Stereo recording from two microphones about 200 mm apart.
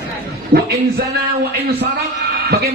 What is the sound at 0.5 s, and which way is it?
Speech, 50° right (ahead or behind).